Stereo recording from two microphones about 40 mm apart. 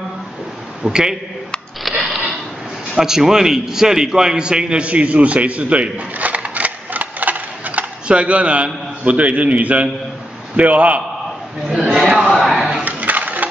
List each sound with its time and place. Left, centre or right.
0.8 s a man's voice: centre
1.8 s sniff: centre
2.9 s a man's voice: centre; by 7.8 s right
8.1 s a man's voice: right
11.6 s a man's voice: centre
12.2 s a sound: centre
12.8 s coin: right